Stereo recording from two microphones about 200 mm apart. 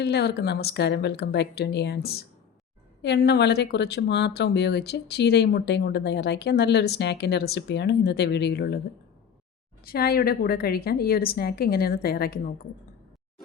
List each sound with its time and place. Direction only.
0.0 s speech: 55° left (ahead or behind)
9.8 s a woman's voice: 50° left (ahead or behind)